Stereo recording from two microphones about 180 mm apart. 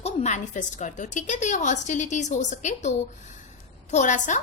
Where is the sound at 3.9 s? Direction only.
45° left (ahead or behind).